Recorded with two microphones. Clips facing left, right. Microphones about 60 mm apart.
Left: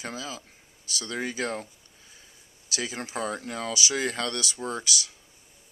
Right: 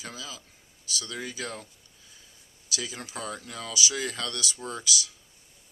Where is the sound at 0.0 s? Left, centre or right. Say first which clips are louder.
Left 5 dB; left.